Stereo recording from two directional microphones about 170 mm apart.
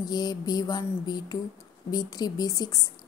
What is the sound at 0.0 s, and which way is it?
A woman's voice, 25° left (ahead or behind).